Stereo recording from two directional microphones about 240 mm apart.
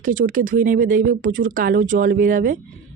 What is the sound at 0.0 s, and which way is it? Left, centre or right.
Speech, right.